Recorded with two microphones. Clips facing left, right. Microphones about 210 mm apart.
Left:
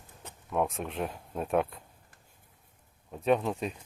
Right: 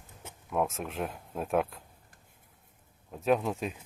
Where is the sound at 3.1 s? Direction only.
Centre (ahead or behind).